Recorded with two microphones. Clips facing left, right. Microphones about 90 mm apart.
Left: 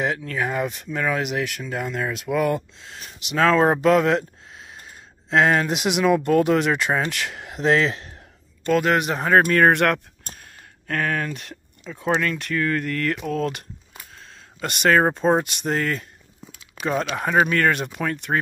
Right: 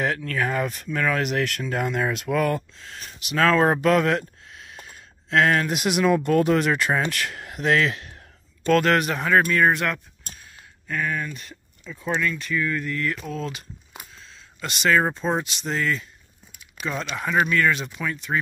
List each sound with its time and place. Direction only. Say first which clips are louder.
0.0 s speech: even; 20° left (ahead or behind); by 2.3 s centre (ahead or behind)
2.3 s speech: left 3 dB; 20° left (ahead or behind)
8.6 s speech: even; 10° left (ahead or behind)
9.0 s speech: left 1 dB; 30° left (ahead or behind)
9.5 s speech: left 4 dB; 60° left (ahead or behind)
10.2 s a sound: left 2 dB; 50° left (ahead or behind)
10.9 s speech: left 3 dB; 70° left (ahead or behind)